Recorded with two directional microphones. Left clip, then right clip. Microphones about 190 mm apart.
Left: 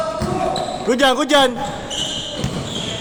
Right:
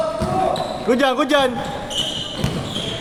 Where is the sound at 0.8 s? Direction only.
25° left (ahead or behind).